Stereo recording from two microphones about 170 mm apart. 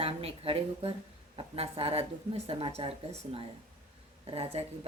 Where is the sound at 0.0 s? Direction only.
35° right (ahead or behind).